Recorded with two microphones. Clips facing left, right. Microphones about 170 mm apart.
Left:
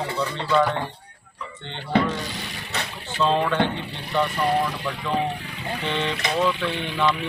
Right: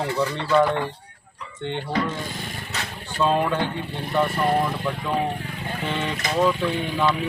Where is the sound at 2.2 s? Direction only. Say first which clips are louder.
Right 1 dB; 50° right (ahead or behind).